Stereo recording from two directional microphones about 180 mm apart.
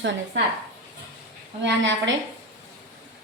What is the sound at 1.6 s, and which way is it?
Speech, 90° right.